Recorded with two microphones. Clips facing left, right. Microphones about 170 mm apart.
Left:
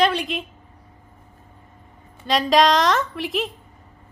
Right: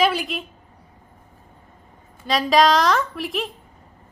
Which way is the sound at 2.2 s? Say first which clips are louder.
Even; centre (ahead or behind).